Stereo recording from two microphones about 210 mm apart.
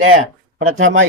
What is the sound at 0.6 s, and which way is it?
Speech, 70° right (ahead or behind).